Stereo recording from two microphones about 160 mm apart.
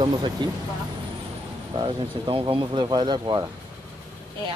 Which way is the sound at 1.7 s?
35° right (ahead or behind).